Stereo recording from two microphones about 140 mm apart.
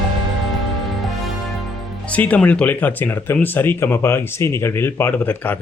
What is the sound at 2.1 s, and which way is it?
Speech, 10° left (ahead or behind).